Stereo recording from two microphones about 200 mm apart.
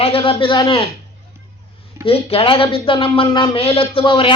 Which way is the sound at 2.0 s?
30° left (ahead or behind).